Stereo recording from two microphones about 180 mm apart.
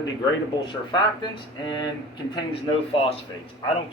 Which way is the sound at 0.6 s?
25° left (ahead or behind).